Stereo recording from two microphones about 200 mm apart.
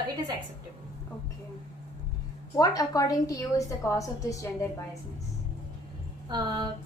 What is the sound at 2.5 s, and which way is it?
A woman's voice, 15° left (ahead or behind).